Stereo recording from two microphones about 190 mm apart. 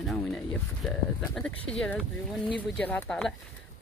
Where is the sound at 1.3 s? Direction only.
5° left (ahead or behind).